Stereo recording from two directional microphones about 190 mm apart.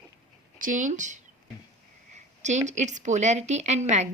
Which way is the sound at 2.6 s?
40° right (ahead or behind).